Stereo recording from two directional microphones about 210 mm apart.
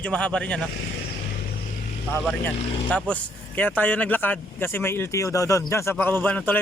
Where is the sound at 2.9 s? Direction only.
5° left (ahead or behind).